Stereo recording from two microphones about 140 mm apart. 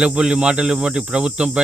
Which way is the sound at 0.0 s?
5° right (ahead or behind).